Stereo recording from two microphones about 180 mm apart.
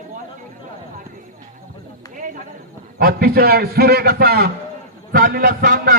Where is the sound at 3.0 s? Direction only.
55° right (ahead or behind).